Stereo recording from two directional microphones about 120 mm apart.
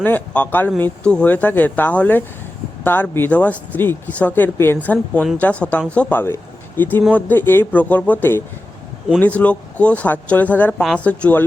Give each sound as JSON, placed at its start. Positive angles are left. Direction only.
{"t": 0.0, "sound": "speech", "side_deg": 15}